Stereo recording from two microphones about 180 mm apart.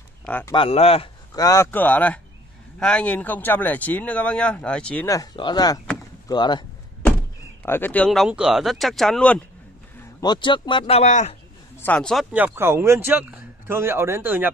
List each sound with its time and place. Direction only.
0.2 s a sound: 10° left (ahead or behind)
0.5 s speech: 30° left (ahead or behind)
1.3 s speech: 20° left (ahead or behind)
5.0 s speech: 20° left (ahead or behind)
7.6 s speech: 10° left (ahead or behind)
10.2 s speech: 25° left (ahead or behind)
11.8 s speech: 5° left (ahead or behind); by 14.5 s 10° right (ahead or behind)